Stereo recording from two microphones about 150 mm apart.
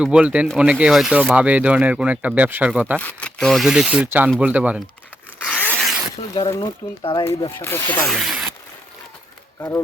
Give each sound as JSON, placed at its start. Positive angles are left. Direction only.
{"t": 0.0, "sound": "speech", "side_deg": -10}
{"t": 3.0, "sound": "speech", "side_deg": 10}
{"t": 5.4, "sound": "zipper", "side_deg": 10}
{"t": 6.5, "sound": "speech", "side_deg": 30}
{"t": 7.6, "sound": "speech", "side_deg": 15}
{"t": 8.0, "sound": "speech", "side_deg": 0}
{"t": 9.6, "sound": "speech", "side_deg": 20}